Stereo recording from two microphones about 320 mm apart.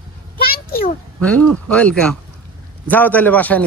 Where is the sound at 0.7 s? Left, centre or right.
Left.